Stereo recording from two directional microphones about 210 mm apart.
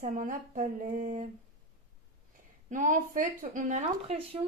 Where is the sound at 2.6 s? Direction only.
40° right (ahead or behind).